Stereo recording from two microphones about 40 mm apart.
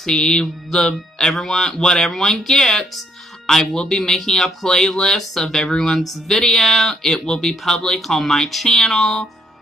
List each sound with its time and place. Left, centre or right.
0.0 s speech: centre